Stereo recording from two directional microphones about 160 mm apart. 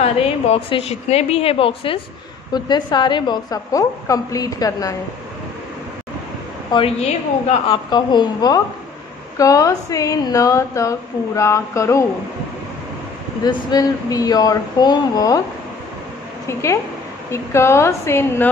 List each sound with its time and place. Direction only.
0.0 s a woman's voice: 40° left (ahead or behind); by 4.9 s 20° left (ahead or behind)
6.7 s a woman's voice: 40° left (ahead or behind)
7.7 s a woman's voice: 25° left (ahead or behind)
13.5 s a woman's voice: 25° left (ahead or behind)
16.4 s a woman's voice: 15° left (ahead or behind)